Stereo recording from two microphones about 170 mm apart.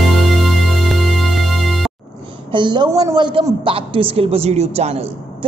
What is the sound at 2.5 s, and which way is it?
A man's voice, 25° right (ahead or behind).